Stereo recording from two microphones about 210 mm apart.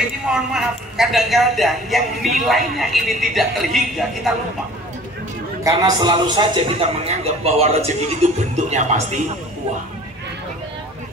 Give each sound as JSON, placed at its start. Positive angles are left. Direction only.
{"t": 0.3, "sound": "a man's voice", "side_deg": 0}
{"t": 5.6, "sound": "a man's voice", "side_deg": -15}